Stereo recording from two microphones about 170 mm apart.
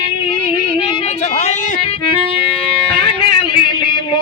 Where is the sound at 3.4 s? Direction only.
25° left (ahead or behind).